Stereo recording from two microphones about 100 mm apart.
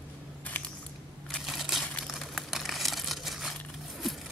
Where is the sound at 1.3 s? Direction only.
Centre (ahead or behind).